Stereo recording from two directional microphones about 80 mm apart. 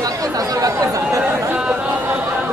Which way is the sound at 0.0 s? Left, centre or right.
Right.